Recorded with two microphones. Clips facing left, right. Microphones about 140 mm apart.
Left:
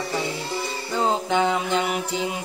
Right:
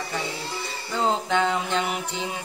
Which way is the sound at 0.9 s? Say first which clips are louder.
Left 1 dB; 10° left (ahead or behind).